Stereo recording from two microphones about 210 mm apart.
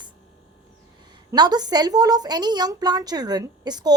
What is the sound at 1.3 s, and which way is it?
Speech, 20° right (ahead or behind).